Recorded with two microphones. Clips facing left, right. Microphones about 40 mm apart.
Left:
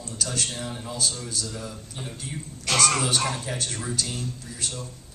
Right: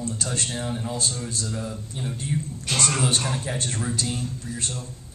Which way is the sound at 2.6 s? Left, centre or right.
Left.